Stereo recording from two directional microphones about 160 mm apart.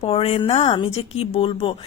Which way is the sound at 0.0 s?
35° left (ahead or behind).